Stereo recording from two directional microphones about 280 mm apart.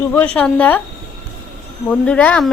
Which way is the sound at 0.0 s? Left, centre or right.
Centre.